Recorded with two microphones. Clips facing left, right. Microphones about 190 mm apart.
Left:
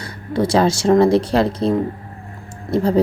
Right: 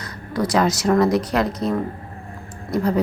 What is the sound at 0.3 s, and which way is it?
Speech, 30° left (ahead or behind).